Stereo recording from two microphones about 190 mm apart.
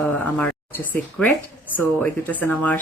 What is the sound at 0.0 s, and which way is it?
A woman's voice, 5° left (ahead or behind).